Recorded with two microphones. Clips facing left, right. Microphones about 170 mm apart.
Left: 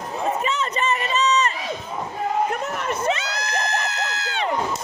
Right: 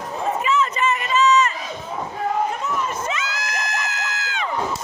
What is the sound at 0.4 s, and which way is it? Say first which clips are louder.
Run: right 3 dB; 40° left (ahead or behind).